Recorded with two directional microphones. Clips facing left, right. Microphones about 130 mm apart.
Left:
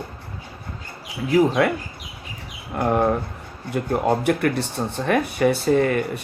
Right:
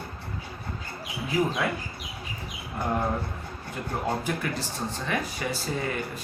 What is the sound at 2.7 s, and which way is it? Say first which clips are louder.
Speech: left 8 dB; 80° left.